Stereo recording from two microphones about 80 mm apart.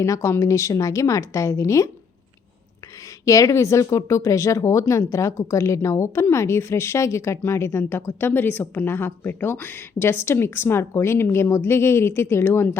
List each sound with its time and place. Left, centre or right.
0.0 s speech: left
3.2 s speech: left